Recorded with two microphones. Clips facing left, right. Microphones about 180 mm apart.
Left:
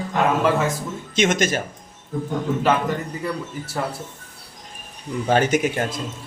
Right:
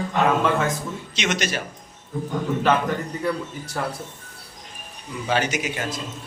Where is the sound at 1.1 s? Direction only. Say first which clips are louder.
Left 6 dB; 50° left (ahead or behind).